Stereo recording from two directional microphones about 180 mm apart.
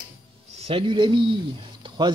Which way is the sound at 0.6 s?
30° right (ahead or behind).